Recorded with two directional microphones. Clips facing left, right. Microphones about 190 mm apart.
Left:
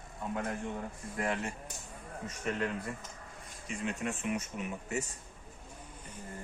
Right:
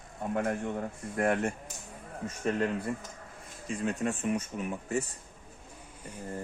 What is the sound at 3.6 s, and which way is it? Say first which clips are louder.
Speech: right 5 dB; 35° right (ahead or behind).